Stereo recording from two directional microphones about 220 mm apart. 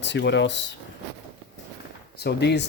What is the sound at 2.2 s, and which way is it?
Speech, 50° left (ahead or behind).